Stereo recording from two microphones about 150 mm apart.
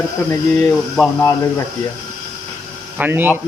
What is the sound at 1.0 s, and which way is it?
Speech, 5° left (ahead or behind).